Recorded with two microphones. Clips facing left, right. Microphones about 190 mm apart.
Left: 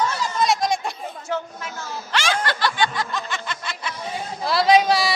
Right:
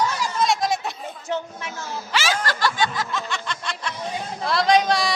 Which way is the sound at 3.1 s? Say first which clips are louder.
Even; centre (ahead or behind).